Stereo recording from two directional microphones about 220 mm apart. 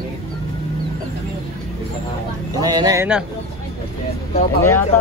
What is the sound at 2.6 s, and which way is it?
Speech, 15° right (ahead or behind).